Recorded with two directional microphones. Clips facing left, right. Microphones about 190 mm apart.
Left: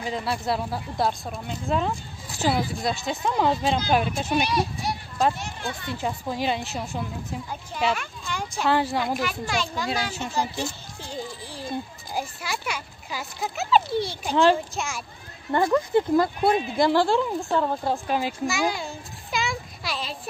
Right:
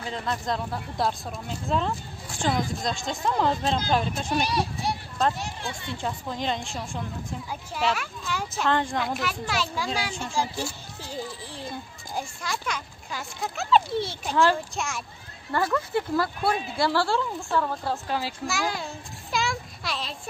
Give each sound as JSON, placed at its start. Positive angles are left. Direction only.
{"t": 0.0, "sound": "speech", "side_deg": 10}
{"t": 5.9, "sound": "a woman's voice", "side_deg": 10}
{"t": 7.9, "sound": "speech", "side_deg": -5}
{"t": 8.6, "sound": "speech", "side_deg": 10}
{"t": 14.3, "sound": "speech", "side_deg": 20}
{"t": 14.8, "sound": "speech", "side_deg": 0}
{"t": 15.5, "sound": "speech", "side_deg": 20}
{"t": 18.5, "sound": "a sound", "side_deg": 0}